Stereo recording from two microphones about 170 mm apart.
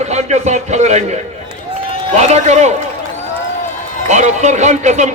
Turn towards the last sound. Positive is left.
turn(degrees=-45)  # may be behind; listen again after turning